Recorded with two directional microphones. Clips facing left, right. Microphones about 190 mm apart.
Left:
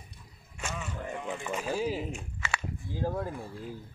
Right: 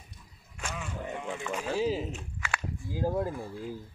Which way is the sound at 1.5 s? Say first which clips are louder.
Right 2 dB; 5° left (ahead or behind).